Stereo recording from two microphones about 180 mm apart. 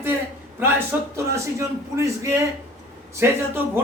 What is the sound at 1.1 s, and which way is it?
A man's voice, 15° right (ahead or behind).